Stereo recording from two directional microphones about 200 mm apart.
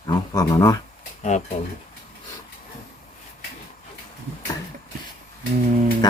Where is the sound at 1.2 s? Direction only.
35° left (ahead or behind).